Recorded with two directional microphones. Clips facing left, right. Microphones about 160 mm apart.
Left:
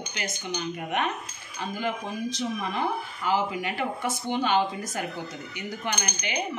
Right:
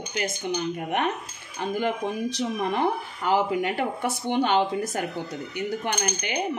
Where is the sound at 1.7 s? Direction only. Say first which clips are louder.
Right 5 dB; 60° right (ahead or behind).